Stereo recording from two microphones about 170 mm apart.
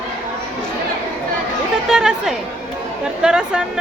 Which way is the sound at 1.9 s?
5° right (ahead or behind).